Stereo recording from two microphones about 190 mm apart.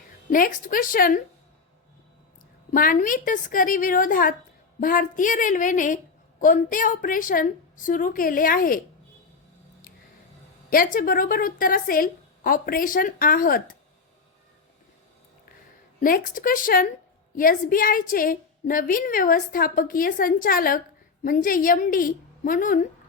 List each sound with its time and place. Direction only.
0.3 s a woman's voice: 45° left (ahead or behind)
2.7 s a woman's voice: 45° left (ahead or behind)
10.9 s a woman's voice: 45° left (ahead or behind)
16.0 s a woman's voice: 45° left (ahead or behind)